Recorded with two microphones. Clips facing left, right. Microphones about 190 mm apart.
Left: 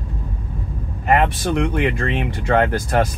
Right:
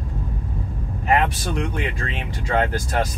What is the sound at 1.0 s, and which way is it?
Speech, 60° left (ahead or behind).